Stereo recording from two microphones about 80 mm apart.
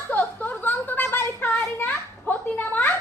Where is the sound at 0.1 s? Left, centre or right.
Left.